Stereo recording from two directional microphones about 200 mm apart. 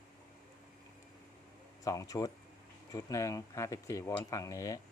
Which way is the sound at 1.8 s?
15° left (ahead or behind).